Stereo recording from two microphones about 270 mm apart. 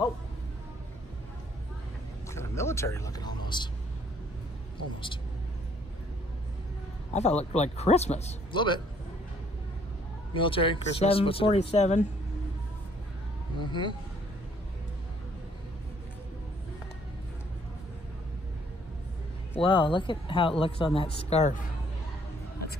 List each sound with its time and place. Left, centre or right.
2.2 s a sound: centre
7.1 s a man's voice: left
10.3 s a man's voice: centre
13.6 s speech: centre
19.5 s a man's voice: centre